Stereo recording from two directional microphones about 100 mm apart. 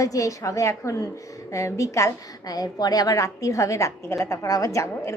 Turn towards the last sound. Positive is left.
turn(degrees=30)  # may be behind; listen again after turning